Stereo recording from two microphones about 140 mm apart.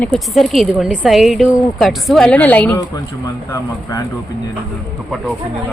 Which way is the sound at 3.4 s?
20° left (ahead or behind).